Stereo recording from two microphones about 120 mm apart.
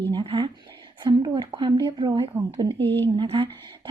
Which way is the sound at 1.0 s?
40° right (ahead or behind).